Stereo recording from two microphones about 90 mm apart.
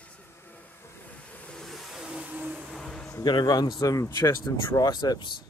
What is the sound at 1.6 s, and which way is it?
Vehicle, centre (ahead or behind).